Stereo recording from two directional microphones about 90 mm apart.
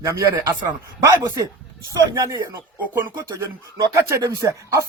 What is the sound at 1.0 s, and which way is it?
Speech, 40° right (ahead or behind).